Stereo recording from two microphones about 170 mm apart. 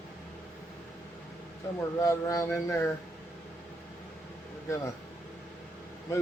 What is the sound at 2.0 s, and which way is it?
Speech, 20° left (ahead or behind).